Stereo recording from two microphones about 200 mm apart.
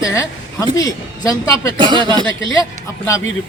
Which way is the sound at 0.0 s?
15° left (ahead or behind).